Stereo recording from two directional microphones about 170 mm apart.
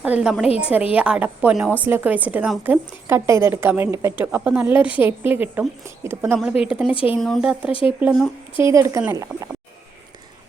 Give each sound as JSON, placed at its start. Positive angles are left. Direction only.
{"t": 0.0, "sound": "a woman's voice", "side_deg": -5}
{"t": 7.7, "sound": "speech", "side_deg": 30}
{"t": 8.0, "sound": "a woman's voice", "side_deg": 0}
{"t": 8.5, "sound": "speech", "side_deg": -15}